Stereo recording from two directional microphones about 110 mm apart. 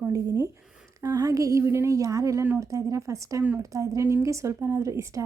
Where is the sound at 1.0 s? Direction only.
30° right (ahead or behind).